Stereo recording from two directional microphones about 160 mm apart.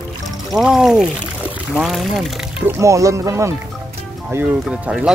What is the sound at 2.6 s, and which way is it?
Speech, 20° right (ahead or behind).